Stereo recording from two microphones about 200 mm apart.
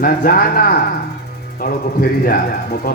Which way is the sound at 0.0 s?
45° left (ahead or behind).